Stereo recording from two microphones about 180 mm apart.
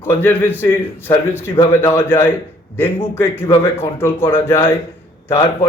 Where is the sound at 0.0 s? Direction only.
10° left (ahead or behind).